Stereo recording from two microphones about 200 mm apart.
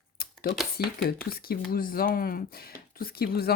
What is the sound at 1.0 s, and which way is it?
Speech, 50° left (ahead or behind).